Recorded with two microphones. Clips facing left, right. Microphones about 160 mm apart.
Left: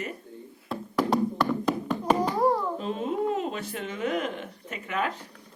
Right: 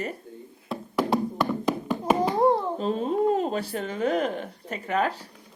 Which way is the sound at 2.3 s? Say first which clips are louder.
Right 3 dB; 25° right (ahead or behind).